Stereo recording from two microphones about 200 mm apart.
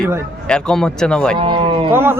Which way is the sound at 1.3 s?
25° right (ahead or behind).